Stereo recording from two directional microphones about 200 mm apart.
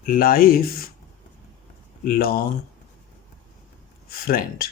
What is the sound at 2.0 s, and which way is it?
Speech, 45° left (ahead or behind).